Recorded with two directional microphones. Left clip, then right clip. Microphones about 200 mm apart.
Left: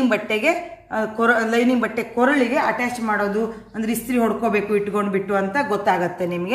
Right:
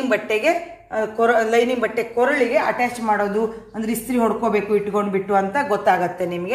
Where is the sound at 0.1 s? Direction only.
20° right (ahead or behind).